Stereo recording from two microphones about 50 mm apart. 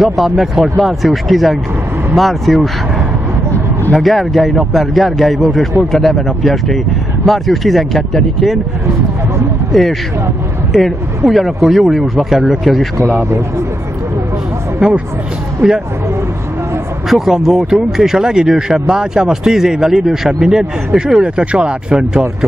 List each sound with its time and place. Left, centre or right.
0.0 s a man's voice: centre
3.9 s a man's voice: centre
9.7 s a man's voice: centre
14.8 s speech: right
17.1 s speech: centre